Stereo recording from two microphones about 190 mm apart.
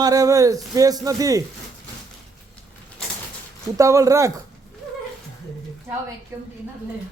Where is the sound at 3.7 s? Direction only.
15° right (ahead or behind).